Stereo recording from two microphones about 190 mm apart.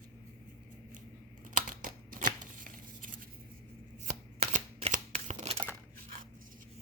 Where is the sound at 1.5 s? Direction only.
45° right (ahead or behind).